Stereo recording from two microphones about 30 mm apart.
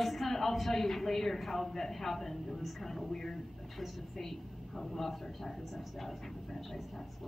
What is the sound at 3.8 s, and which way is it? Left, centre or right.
Speech, centre.